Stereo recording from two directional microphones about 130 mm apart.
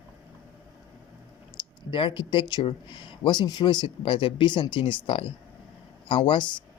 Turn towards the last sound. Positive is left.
turn(degrees=40)  # may be behind; listen again after turning